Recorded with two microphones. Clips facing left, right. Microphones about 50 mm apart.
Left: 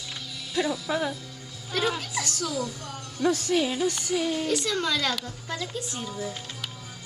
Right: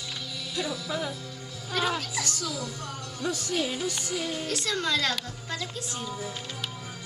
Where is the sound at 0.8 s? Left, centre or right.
Left.